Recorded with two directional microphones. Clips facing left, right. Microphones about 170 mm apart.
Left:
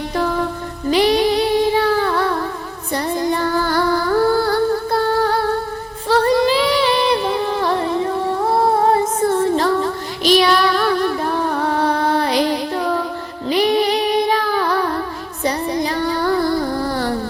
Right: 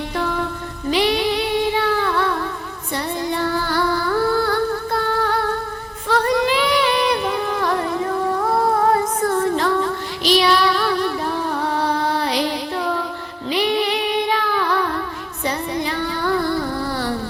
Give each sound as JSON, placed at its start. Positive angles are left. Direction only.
{"t": 0.2, "sound": "music", "side_deg": 40}
{"t": 0.9, "sound": "child singing", "side_deg": 40}
{"t": 2.9, "sound": "music", "side_deg": 45}
{"t": 10.2, "sound": "child singing", "side_deg": 50}
{"t": 12.0, "sound": "music", "side_deg": 50}